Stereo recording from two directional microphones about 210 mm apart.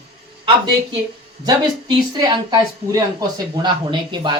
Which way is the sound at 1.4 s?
20° right (ahead or behind).